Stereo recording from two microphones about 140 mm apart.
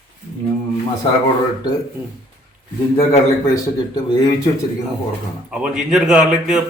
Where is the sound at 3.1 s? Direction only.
25° left (ahead or behind).